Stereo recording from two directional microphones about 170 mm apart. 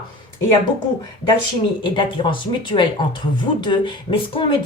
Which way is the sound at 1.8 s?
30° left (ahead or behind).